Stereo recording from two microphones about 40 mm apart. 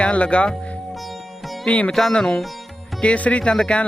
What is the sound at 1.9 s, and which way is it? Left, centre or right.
Speech, centre.